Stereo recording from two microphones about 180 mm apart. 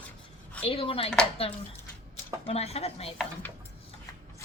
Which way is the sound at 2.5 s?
35° left (ahead or behind).